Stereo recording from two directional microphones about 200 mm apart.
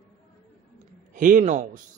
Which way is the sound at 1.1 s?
40° right (ahead or behind).